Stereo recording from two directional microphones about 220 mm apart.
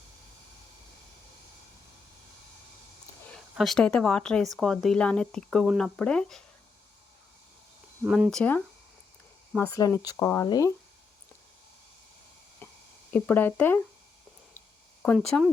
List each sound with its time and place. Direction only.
3.3 s speech: centre (ahead or behind)
8.0 s speech: 5° right (ahead or behind); by 10.7 s 20° left (ahead or behind)
12.6 s a sound: 10° left (ahead or behind)
13.1 s speech: 10° left (ahead or behind)
15.0 s speech: centre (ahead or behind)